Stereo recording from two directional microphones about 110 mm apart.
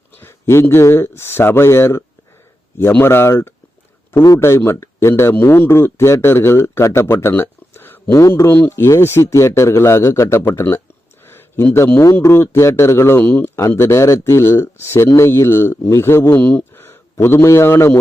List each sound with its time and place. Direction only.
0.2 s a man's voice: 25° left (ahead or behind)